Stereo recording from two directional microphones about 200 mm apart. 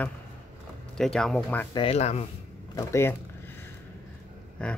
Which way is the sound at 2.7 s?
10° left (ahead or behind).